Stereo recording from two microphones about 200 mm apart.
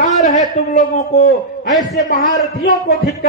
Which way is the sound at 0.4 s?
35° left (ahead or behind).